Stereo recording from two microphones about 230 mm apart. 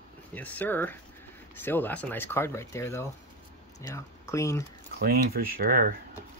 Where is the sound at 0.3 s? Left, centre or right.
Centre.